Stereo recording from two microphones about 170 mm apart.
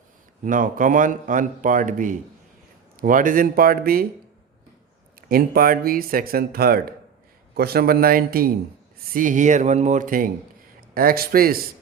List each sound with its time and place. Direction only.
0.4 s a man's voice: 50° right (ahead or behind)
5.3 s speech: 60° right (ahead or behind)
9.1 s a man's voice: 50° right (ahead or behind)